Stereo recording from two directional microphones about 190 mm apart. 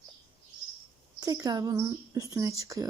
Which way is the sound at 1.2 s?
20° right (ahead or behind).